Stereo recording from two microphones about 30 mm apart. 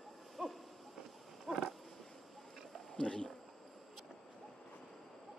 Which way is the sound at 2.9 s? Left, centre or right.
Left.